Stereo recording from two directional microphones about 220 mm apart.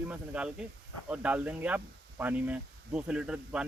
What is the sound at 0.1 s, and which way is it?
Speech, 5° right (ahead or behind).